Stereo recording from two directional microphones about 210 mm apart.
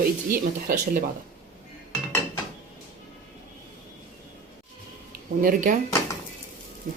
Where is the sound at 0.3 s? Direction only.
40° right (ahead or behind).